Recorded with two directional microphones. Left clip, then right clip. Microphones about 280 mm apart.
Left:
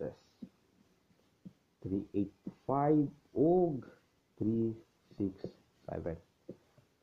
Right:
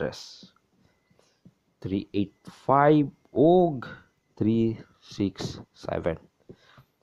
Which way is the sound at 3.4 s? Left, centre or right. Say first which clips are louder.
Right 10 dB; right.